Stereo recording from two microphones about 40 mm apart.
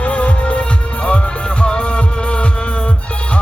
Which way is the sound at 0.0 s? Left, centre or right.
Left.